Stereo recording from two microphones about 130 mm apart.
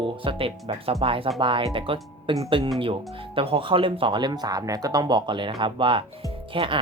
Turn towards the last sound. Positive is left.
turn(degrees=-40)  # may be behind; listen again after turning